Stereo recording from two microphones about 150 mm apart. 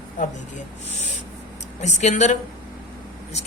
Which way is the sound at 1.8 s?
50° left (ahead or behind).